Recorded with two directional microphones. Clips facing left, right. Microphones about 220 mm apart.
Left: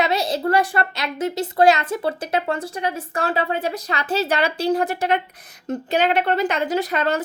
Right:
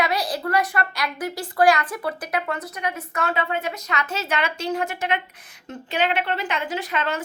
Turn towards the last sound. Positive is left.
turn(degrees=40)  # may be behind; listen again after turning